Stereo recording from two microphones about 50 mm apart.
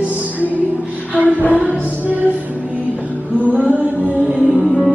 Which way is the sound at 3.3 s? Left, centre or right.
Right.